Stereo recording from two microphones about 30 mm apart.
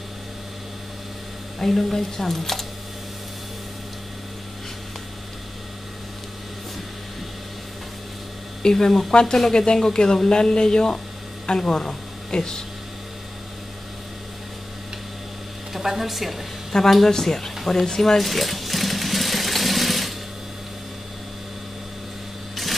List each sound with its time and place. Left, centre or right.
1.6 s speech: centre
8.7 s speech: centre
15.7 s speech: centre
16.7 s speech: left
18.2 s a sound: centre